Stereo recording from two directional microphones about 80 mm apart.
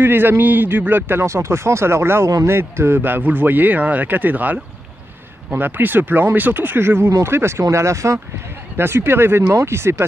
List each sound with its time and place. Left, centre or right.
0.0 s speech: right